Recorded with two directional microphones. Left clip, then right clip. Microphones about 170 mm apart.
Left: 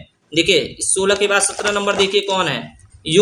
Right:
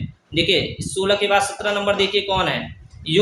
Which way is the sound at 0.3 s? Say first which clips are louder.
Left 3 dB; 45° left (ahead or behind).